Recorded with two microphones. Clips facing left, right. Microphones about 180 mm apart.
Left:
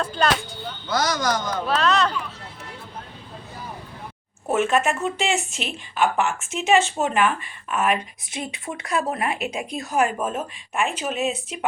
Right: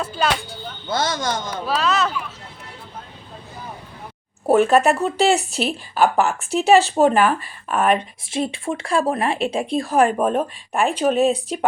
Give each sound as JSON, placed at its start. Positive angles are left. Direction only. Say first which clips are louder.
{"t": 0.0, "sound": "speech", "louder": "even", "side_deg": -5}
{"t": 0.9, "sound": "speech", "louder": "even", "side_deg": -25}
{"t": 1.6, "sound": "speech", "louder": "right 1 dB", "side_deg": -5}
{"t": 4.4, "sound": "speech", "louder": "right 6 dB", "side_deg": -35}